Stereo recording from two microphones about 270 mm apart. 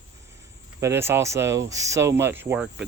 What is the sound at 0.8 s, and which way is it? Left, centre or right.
Speech, centre.